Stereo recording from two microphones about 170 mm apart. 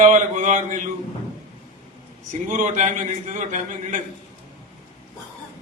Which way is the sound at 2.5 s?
45° right (ahead or behind).